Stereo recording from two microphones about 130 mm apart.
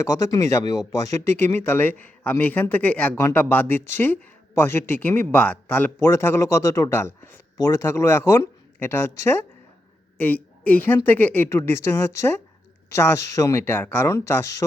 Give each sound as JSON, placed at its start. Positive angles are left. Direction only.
{"t": 0.0, "sound": "speech", "side_deg": 25}